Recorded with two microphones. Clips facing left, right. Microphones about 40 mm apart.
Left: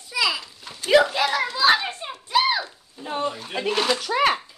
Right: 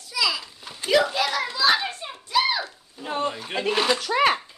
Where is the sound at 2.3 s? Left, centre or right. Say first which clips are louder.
Left 2 dB; left.